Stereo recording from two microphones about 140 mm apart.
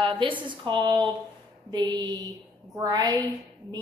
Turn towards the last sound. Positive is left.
turn(degrees=-30)  # may be behind; listen again after turning